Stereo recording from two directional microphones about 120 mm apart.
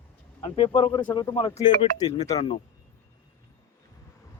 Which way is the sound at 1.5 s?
30° left (ahead or behind).